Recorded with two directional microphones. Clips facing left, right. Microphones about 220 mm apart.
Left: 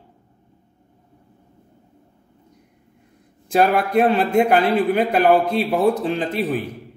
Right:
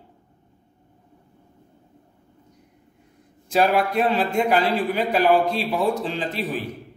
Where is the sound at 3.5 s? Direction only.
50° left (ahead or behind).